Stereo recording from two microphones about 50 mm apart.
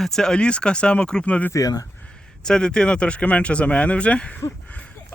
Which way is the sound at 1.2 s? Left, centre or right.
Left.